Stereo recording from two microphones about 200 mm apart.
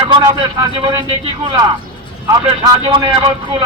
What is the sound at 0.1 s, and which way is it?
Speech, 20° right (ahead or behind).